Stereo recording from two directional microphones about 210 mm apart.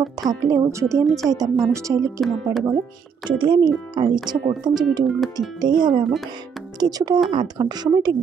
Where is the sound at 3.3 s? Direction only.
20° right (ahead or behind).